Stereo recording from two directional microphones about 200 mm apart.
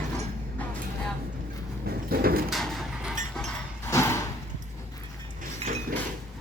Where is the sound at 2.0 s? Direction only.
50° right (ahead or behind).